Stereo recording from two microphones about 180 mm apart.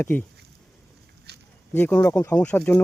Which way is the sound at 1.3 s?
65° right (ahead or behind).